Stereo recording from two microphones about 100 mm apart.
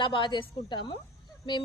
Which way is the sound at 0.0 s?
55° left (ahead or behind).